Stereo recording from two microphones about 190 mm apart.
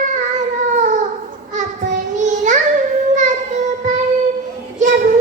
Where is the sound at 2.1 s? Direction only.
40° right (ahead or behind).